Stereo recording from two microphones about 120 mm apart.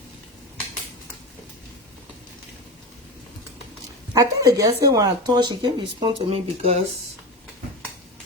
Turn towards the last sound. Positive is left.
turn(degrees=-55)  # may be behind; listen again after turning